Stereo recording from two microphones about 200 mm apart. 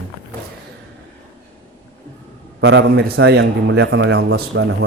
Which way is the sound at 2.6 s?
65° right (ahead or behind).